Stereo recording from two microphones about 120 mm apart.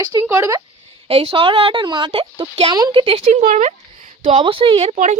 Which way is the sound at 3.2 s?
80° right.